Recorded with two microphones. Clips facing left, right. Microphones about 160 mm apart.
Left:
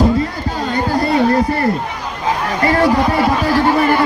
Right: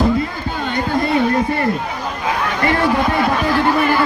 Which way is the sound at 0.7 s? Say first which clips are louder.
Left 2 dB; 35° left (ahead or behind).